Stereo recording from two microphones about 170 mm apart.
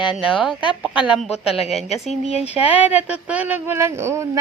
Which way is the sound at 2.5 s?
10° right (ahead or behind).